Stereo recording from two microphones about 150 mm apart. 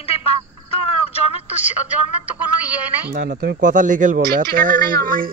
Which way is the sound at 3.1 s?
80° right.